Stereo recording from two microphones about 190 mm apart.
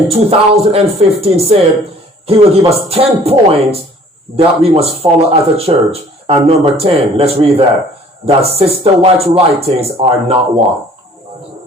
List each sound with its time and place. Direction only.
0.1 s speech: 30° right (ahead or behind)